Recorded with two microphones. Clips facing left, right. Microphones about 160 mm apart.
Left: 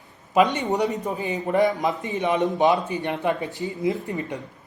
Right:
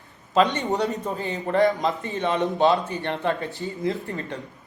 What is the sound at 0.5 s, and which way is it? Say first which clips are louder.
A man's voice: left 1 dB; 15° left (ahead or behind).